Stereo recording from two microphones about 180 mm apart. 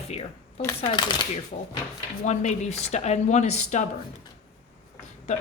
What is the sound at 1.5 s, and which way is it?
Speech, 45° left (ahead or behind).